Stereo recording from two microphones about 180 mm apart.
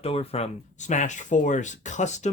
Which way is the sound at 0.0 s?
35° left (ahead or behind).